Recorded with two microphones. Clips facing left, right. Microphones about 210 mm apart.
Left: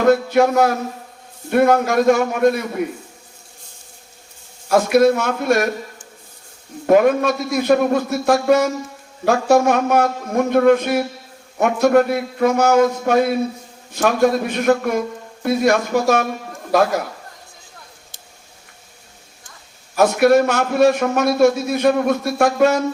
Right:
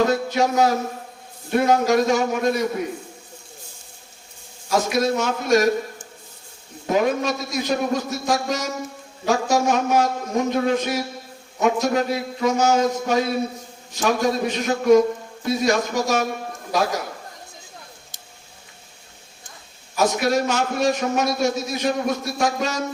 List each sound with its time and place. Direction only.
0.0 s a man's voice: 55° left (ahead or behind)
4.7 s a man's voice: 60° left (ahead or behind)
6.8 s a man's voice: 55° left (ahead or behind)
20.0 s a man's voice: 60° left (ahead or behind)